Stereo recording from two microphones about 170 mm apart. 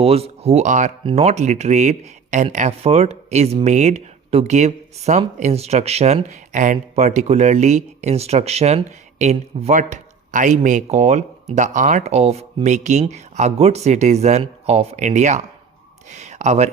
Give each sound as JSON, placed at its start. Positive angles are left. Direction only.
{"t": 0.0, "sound": "speech", "side_deg": -35}